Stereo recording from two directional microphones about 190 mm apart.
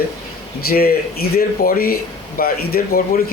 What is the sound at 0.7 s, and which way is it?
Speech, 55° left (ahead or behind).